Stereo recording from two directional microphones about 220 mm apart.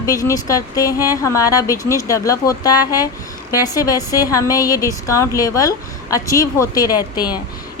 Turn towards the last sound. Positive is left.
turn(degrees=20)  # may be behind; listen again after turning